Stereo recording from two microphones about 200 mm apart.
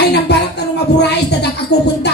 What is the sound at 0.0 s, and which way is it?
Music, 55° left (ahead or behind).